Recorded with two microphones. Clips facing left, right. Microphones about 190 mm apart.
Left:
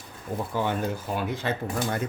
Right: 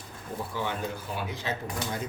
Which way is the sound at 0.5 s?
50° left (ahead or behind).